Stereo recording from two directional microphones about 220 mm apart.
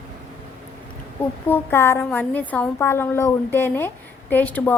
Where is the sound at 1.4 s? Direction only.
10° left (ahead or behind).